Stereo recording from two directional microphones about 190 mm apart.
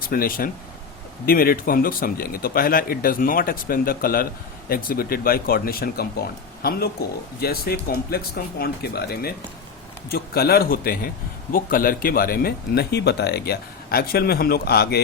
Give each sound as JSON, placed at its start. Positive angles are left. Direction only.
{"t": 0.0, "sound": "speech", "side_deg": 50}